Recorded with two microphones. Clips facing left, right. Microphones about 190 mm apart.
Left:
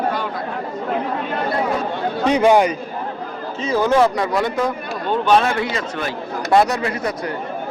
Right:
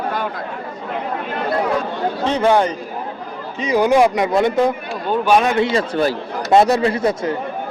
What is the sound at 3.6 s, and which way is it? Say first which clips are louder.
Speech: right 2 dB; 15° right (ahead or behind).